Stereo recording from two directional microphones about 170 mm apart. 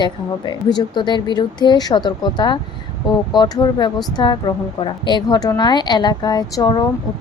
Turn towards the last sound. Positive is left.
turn(degrees=25)  # may be behind; listen again after turning